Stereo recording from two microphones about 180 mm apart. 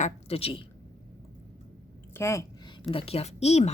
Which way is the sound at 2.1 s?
15° left (ahead or behind).